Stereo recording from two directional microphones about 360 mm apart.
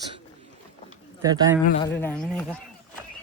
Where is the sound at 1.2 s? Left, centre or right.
Centre.